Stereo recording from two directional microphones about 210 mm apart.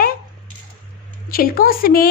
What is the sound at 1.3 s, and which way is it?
Speech, 45° left (ahead or behind).